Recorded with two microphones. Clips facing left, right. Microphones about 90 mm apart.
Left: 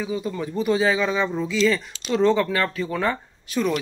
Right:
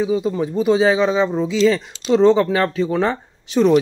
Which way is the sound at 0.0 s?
20° right (ahead or behind).